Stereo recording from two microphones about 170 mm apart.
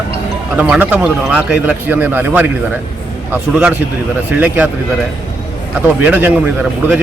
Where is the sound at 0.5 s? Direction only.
10° right (ahead or behind).